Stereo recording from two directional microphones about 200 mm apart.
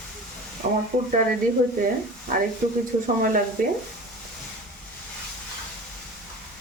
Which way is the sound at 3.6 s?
45° right (ahead or behind).